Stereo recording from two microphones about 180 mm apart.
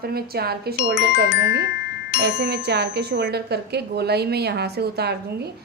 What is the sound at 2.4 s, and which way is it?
A woman's voice, 70° right (ahead or behind).